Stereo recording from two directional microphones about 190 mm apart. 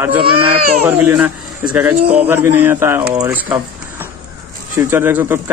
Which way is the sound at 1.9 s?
30° right (ahead or behind).